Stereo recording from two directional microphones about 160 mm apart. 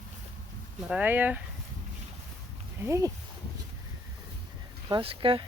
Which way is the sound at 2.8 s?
20° right (ahead or behind).